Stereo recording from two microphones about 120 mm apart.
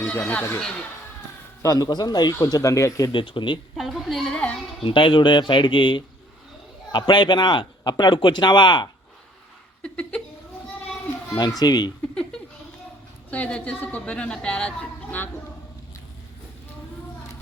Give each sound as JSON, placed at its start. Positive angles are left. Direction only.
{"t": 0.0, "sound": "speech", "side_deg": 15}
{"t": 1.6, "sound": "a man's voice", "side_deg": 30}
{"t": 3.1, "sound": "speech", "side_deg": 45}
{"t": 3.8, "sound": "a sound", "side_deg": 0}
{"t": 4.8, "sound": "speech", "side_deg": 45}
{"t": 9.8, "sound": "speech", "side_deg": 10}
{"t": 11.3, "sound": "speech", "side_deg": 35}
{"t": 13.3, "sound": "a woman's voice", "side_deg": 10}